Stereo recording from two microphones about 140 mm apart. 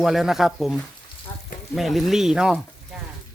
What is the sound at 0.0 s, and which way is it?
Speech, centre (ahead or behind).